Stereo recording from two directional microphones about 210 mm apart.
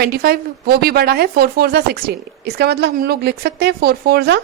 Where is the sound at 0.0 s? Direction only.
45° right (ahead or behind).